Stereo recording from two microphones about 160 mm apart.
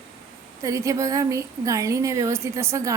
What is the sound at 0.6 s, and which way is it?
A woman's voice, 20° right (ahead or behind).